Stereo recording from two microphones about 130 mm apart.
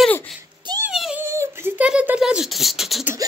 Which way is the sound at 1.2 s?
20° right (ahead or behind).